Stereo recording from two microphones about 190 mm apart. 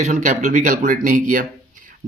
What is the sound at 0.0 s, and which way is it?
Speech, 40° right (ahead or behind).